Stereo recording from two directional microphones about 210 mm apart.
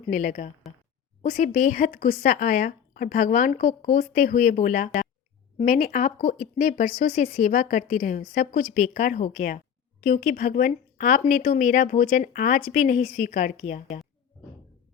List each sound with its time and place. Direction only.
0.1 s speech: 40° left (ahead or behind)